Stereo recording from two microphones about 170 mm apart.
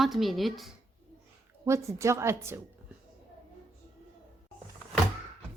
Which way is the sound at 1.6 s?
15° right (ahead or behind).